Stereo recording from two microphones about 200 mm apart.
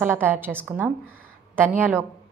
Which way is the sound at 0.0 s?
10° right (ahead or behind).